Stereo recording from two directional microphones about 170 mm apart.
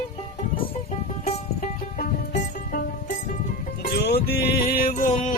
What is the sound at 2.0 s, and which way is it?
Music, 60° left (ahead or behind).